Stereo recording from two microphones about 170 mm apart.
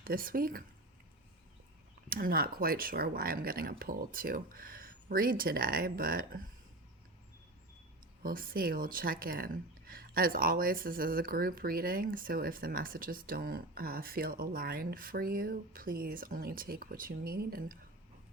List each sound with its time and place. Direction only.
0.0 s speech: 55° right (ahead or behind)
2.0 s speech: 60° right (ahead or behind)
8.2 s speech: 55° right (ahead or behind)